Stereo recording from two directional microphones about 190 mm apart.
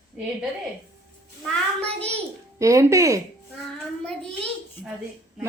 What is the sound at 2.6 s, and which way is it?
Speech, 15° right (ahead or behind).